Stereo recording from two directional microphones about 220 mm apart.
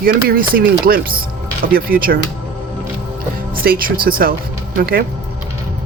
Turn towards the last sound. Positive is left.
turn(degrees=-45)  # may be behind; listen again after turning